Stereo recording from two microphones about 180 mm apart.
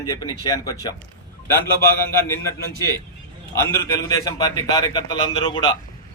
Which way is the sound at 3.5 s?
15° left (ahead or behind).